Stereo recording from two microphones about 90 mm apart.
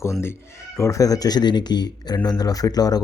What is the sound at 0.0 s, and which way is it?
Speech, 30° left (ahead or behind).